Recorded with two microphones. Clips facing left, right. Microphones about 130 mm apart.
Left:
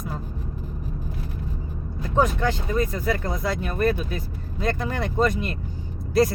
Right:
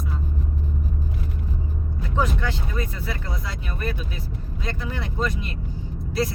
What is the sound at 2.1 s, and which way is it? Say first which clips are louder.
Speech: left 4 dB; 45° left (ahead or behind).